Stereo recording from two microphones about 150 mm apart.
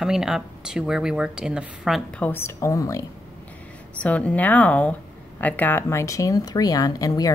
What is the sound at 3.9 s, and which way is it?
Speech, 10° left (ahead or behind).